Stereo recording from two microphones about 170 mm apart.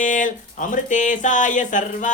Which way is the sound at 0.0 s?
50° left (ahead or behind).